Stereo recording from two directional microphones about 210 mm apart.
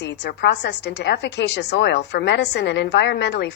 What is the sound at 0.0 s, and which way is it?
A woman's voice, 55° left (ahead or behind).